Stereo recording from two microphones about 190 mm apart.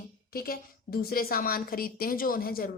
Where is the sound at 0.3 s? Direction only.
55° left (ahead or behind).